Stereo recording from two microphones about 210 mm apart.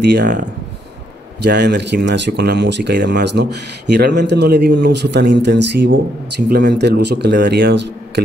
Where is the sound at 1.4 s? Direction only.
55° right (ahead or behind).